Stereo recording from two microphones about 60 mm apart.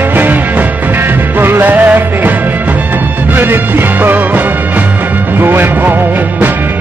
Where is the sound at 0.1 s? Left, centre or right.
Right.